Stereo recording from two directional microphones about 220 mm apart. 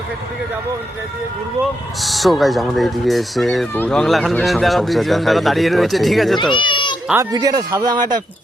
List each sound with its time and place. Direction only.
2.0 s speech: centre (ahead or behind)
6.4 s speech: 20° left (ahead or behind)
7.1 s speech: 15° right (ahead or behind)